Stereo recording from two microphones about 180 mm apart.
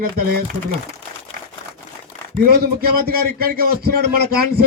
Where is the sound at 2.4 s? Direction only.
60° right (ahead or behind).